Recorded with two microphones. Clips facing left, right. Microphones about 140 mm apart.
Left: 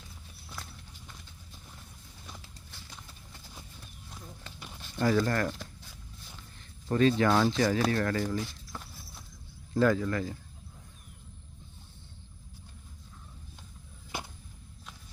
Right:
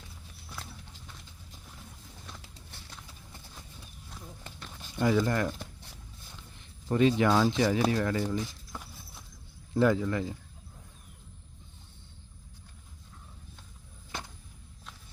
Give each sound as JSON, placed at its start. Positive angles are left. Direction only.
{"t": 4.8, "sound": "speech", "side_deg": -10}
{"t": 6.8, "sound": "speech", "side_deg": -15}
{"t": 8.4, "sound": "clip-clop", "side_deg": -15}
{"t": 9.7, "sound": "speech", "side_deg": -20}